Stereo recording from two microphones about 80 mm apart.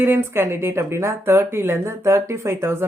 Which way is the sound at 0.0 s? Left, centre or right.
Right.